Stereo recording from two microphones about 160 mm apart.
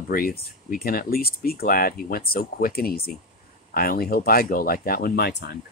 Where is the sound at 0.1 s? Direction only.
70° left (ahead or behind).